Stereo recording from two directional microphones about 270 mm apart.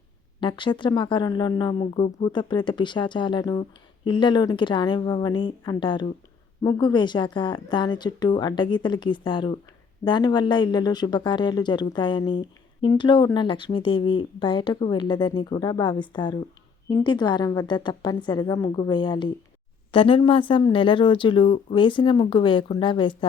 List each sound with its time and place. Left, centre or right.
0.3 s speech: centre